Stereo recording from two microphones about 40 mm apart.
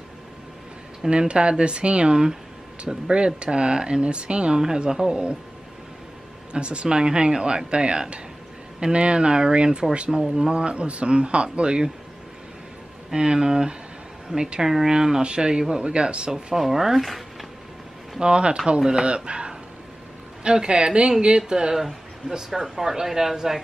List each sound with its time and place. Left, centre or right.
1.1 s speech: right
6.5 s speech: right
13.1 s speech: right
16.5 s speech: centre
18.2 s speech: right
22.5 s speech: centre